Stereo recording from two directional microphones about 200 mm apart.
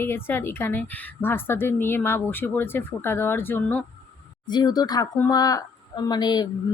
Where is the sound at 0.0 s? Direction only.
10° left (ahead or behind).